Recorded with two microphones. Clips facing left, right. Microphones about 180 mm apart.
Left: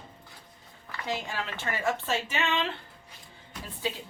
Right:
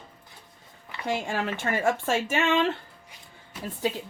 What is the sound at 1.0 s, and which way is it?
Speech, 50° right (ahead or behind).